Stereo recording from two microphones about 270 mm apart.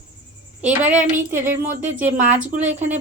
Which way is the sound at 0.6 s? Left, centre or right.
Centre.